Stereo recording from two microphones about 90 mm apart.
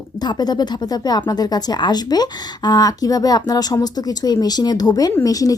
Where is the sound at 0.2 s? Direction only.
50° left (ahead or behind).